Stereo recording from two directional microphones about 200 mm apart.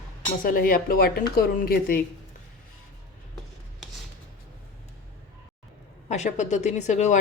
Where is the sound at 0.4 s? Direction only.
45° left (ahead or behind).